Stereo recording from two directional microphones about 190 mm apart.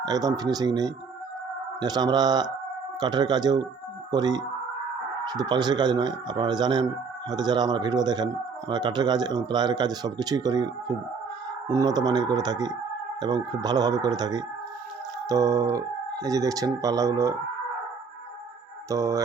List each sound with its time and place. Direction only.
0.0 s speech: 20° right (ahead or behind)
18.9 s speech: 15° right (ahead or behind)